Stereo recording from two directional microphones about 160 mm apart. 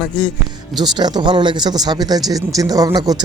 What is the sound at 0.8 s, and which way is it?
Speech, 25° right (ahead or behind).